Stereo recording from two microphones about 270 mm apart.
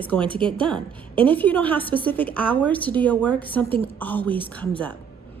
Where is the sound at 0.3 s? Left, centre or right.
Centre.